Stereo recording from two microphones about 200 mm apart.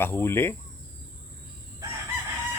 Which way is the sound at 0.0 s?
10° left (ahead or behind).